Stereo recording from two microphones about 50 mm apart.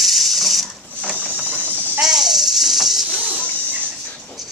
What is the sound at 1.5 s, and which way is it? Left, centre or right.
Goat, right.